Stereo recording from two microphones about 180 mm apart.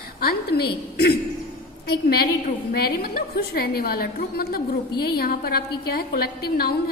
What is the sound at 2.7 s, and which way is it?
A woman's voice, 60° left (ahead or behind).